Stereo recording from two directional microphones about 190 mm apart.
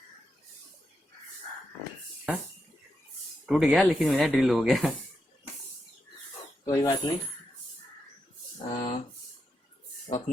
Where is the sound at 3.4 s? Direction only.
5° right (ahead or behind).